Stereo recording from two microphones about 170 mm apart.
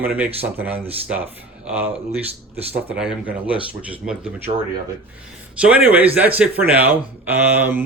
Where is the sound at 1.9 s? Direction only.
35° right (ahead or behind).